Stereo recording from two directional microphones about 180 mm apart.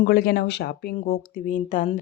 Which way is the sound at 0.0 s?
55° left (ahead or behind).